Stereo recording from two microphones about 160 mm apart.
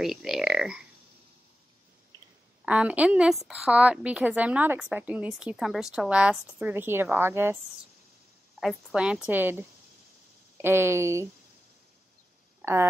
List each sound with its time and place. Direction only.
0.0 s speech: centre (ahead or behind)
2.6 s a woman's voice: 10° right (ahead or behind)
8.5 s a woman's voice: 5° right (ahead or behind)
12.6 s speech: 15° right (ahead or behind)